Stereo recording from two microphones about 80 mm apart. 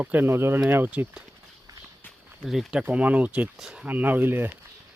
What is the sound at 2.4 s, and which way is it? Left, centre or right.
Speech, centre.